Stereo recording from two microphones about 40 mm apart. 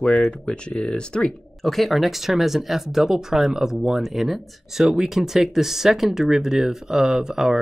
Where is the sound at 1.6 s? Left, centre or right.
Centre.